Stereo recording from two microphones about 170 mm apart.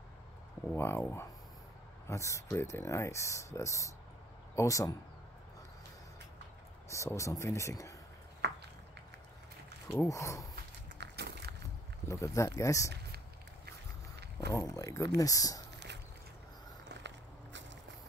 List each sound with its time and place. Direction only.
0.7 s speech: 15° left (ahead or behind)
6.9 s speech: 15° left (ahead or behind)
10.0 s speech: 20° left (ahead or behind)
11.0 s a sound: 75° right (ahead or behind)
12.1 s speech: 20° left (ahead or behind)
14.1 s a sound: 75° right (ahead or behind)
14.5 s speech: 20° left (ahead or behind)
16.9 s walk: 90° right